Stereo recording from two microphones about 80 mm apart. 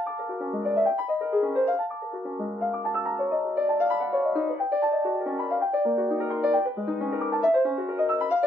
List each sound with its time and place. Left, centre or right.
0.7 s music: centre
3.5 s music: right
4.1 s music: centre
5.5 s music: right
6.0 s music: centre
7.2 s music: centre